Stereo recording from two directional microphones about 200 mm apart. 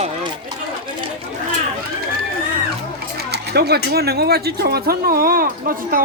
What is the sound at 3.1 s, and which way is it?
Speech, 55° right (ahead or behind).